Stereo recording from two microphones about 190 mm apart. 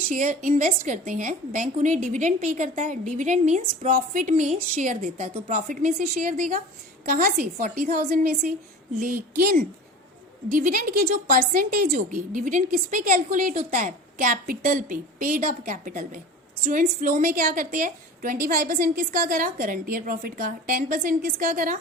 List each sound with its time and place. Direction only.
0.1 s a woman's voice: 45° right (ahead or behind)